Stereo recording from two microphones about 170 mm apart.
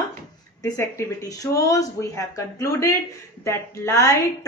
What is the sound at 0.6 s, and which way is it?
A woman's voice, 20° left (ahead or behind).